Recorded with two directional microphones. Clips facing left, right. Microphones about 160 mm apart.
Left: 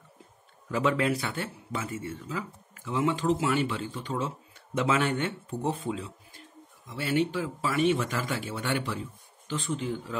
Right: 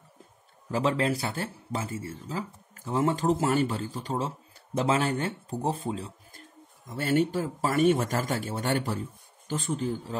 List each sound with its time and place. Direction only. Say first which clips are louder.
0.7 s speech: even; 30° right (ahead or behind)